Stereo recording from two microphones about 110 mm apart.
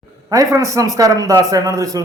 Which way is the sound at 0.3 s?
30° right (ahead or behind).